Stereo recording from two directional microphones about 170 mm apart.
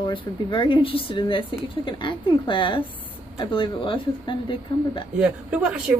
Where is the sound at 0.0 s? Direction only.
30° left (ahead or behind).